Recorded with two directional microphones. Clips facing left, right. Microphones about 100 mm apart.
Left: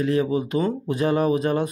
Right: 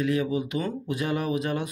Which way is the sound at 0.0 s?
35° left (ahead or behind).